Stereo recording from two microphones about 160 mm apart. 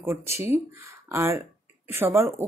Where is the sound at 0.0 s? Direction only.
15° right (ahead or behind).